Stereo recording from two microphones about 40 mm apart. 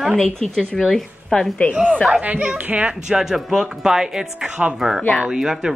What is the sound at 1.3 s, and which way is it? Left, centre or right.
Speech, left.